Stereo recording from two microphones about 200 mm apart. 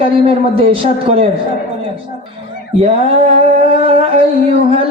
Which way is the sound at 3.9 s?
30° right (ahead or behind).